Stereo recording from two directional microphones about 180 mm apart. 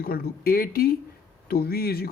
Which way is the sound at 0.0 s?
55° left (ahead or behind).